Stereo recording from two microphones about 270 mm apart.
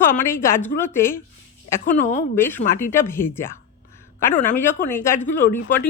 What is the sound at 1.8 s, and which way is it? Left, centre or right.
Speech, left.